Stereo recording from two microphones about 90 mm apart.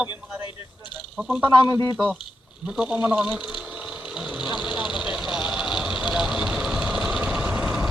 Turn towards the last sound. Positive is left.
turn(degrees=-5)  # may be behind; listen again after turning